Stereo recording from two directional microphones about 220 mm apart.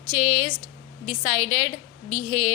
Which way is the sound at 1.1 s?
30° right (ahead or behind).